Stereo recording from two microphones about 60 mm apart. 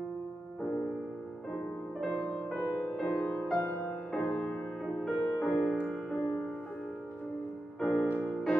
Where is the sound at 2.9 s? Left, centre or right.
Centre.